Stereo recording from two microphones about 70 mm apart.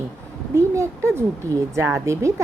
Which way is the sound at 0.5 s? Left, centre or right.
Right.